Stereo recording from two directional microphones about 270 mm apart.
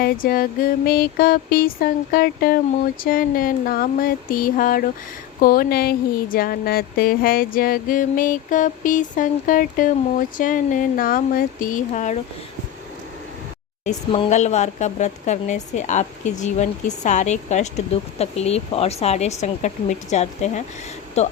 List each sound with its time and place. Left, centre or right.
0.0 s speech: left
13.8 s a woman's voice: left